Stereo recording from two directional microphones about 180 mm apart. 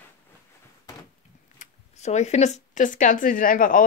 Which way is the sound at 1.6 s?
40° left (ahead or behind).